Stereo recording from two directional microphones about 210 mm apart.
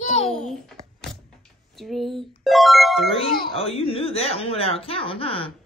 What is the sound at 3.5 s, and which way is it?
Speech, 25° left (ahead or behind).